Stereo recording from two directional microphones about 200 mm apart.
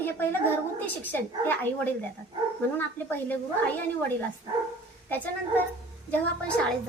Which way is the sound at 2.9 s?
10° left (ahead or behind).